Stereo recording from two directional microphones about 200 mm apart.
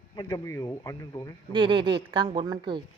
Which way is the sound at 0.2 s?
20° left (ahead or behind).